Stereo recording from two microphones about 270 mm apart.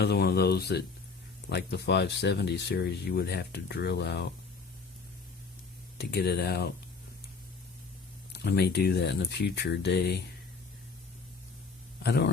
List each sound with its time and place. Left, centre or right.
0.0 s speech: left
6.0 s speech: left
8.3 s speech: left
12.0 s speech: left